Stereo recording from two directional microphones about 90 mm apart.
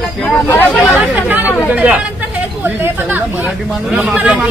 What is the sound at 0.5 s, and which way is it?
Chatter, 20° left (ahead or behind).